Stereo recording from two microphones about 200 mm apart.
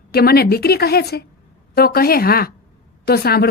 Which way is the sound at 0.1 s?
50° left (ahead or behind).